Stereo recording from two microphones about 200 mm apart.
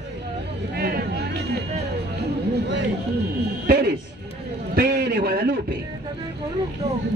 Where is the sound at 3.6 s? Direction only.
50° right (ahead or behind).